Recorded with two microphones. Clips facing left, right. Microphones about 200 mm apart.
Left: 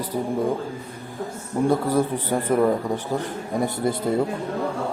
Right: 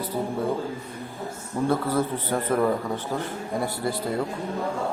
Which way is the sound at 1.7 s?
15° left (ahead or behind).